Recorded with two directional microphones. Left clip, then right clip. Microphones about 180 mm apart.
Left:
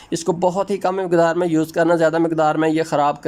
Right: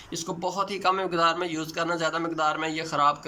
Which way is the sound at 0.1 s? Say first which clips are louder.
Left 12 dB; 45° left (ahead or behind).